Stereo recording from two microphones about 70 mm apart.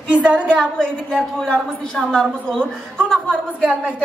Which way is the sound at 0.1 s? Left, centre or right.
Centre.